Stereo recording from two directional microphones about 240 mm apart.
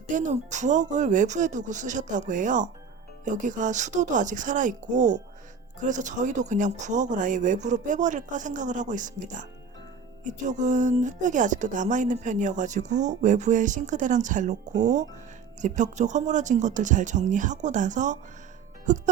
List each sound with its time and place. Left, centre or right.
0.1 s a woman's voice: right